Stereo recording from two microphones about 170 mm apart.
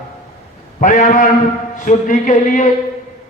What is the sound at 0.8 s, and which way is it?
A man's voice, 50° left (ahead or behind).